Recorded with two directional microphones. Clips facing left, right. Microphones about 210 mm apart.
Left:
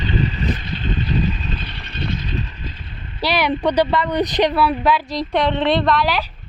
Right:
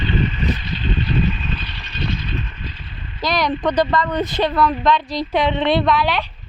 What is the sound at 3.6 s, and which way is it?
A woman's voice, 10° left (ahead or behind).